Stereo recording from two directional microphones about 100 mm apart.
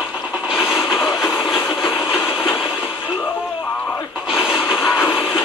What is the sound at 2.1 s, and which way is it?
Train, 20° left (ahead or behind).